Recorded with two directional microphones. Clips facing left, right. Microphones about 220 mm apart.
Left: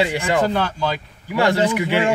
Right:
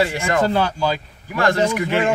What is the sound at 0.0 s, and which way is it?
Speech, 15° left (ahead or behind).